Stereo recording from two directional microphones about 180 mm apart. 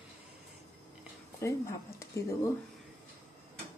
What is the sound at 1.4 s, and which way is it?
Speech, 15° left (ahead or behind).